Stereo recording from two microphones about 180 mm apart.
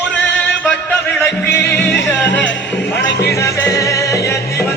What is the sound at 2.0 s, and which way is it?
Speech, 10° left (ahead or behind).